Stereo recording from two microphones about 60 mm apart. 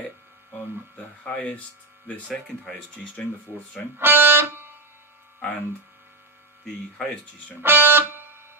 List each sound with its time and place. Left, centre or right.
1.2 s speech: left
2.2 s speech: centre
4.0 s speech: right
7.6 s music: right